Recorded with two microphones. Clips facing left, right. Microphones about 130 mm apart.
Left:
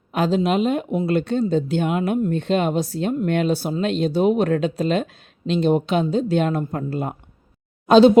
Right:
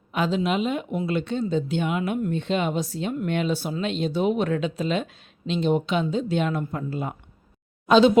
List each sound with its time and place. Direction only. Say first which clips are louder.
0.1 s speech: left 4 dB; 40° left (ahead or behind)